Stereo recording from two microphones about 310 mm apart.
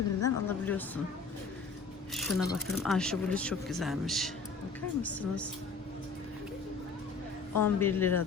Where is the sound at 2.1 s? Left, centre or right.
Centre.